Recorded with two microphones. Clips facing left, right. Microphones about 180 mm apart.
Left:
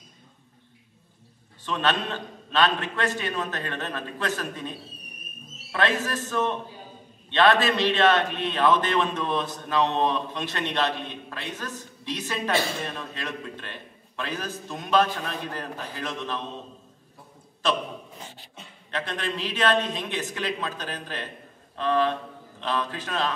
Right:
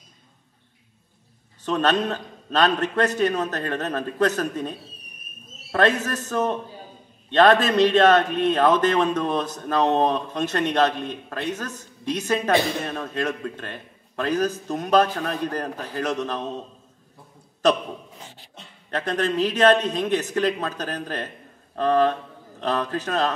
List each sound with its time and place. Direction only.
1.6 s a man's voice: 45° right (ahead or behind)
18.9 s a man's voice: 45° right (ahead or behind)